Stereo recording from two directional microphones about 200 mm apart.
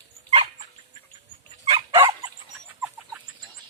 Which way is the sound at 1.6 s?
25° right (ahead or behind).